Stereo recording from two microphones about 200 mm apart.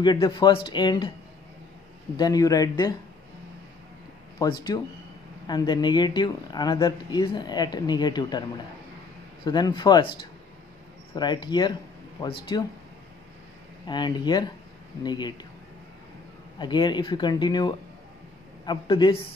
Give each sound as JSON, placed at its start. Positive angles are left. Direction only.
{"t": 0.0, "sound": "speech", "side_deg": 20}
{"t": 2.1, "sound": "speech", "side_deg": 20}
{"t": 4.4, "sound": "speech", "side_deg": 20}
{"t": 11.1, "sound": "speech", "side_deg": 20}
{"t": 13.8, "sound": "speech", "side_deg": 20}
{"t": 16.5, "sound": "speech", "side_deg": 20}